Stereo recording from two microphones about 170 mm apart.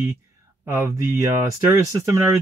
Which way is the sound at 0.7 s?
15° right (ahead or behind).